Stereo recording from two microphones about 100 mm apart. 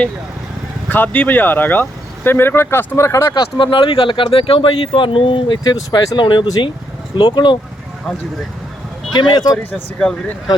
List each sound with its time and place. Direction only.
0.9 s speech: 20° left (ahead or behind)
3.3 s speech: 55° left (ahead or behind)
9.1 s speech: 50° left (ahead or behind)
10.0 s speech: 5° left (ahead or behind)